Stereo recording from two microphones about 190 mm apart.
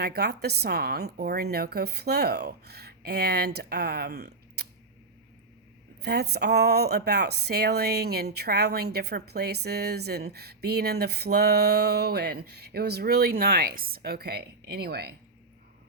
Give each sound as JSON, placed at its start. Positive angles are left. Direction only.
{"t": 0.0, "sound": "a woman's voice", "side_deg": -55}
{"t": 6.0, "sound": "a woman's voice", "side_deg": -60}